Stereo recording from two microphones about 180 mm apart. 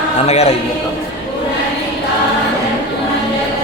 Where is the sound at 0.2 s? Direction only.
40° left (ahead or behind).